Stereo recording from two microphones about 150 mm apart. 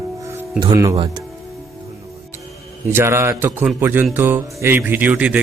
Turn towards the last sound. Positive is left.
turn(degrees=-10)  # may be behind; listen again after turning